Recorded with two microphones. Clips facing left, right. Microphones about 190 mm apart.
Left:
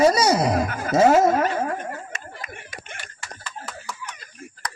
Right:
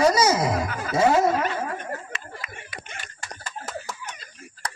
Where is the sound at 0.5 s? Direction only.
50° left (ahead or behind).